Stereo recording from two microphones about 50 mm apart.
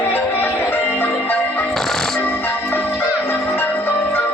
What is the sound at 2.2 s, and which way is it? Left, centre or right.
Music, left.